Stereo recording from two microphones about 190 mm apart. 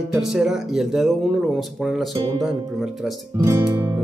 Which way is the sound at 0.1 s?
Centre (ahead or behind).